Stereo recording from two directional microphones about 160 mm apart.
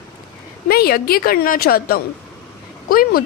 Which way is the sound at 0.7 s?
70° left (ahead or behind).